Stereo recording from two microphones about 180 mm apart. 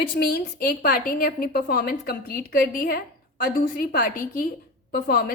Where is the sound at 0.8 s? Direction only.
50° left (ahead or behind).